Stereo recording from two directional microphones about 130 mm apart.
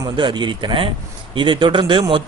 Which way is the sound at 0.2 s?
40° right (ahead or behind).